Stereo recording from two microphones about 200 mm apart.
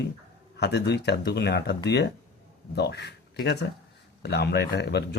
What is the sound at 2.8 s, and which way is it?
Speech, 55° left (ahead or behind).